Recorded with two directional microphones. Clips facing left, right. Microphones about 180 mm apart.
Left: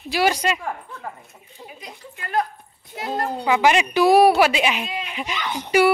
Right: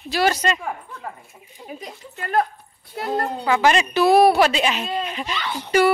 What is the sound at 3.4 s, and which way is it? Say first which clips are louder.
Speech: left 1 dB; 15° left (ahead or behind).